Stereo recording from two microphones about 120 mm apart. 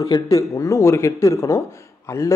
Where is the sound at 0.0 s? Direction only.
25° left (ahead or behind).